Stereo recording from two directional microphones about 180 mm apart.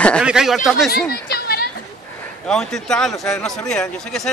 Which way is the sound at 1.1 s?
60° left (ahead or behind).